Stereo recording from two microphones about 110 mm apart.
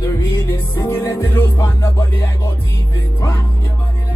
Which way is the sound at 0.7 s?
20° left (ahead or behind).